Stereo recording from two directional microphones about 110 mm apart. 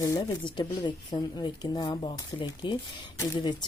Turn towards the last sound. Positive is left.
turn(degrees=25)  # may be behind; listen again after turning